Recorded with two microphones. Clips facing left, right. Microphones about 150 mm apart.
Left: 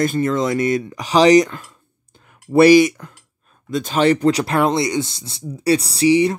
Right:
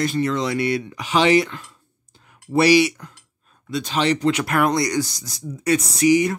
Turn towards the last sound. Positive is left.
turn(degrees=30)  # may be behind; listen again after turning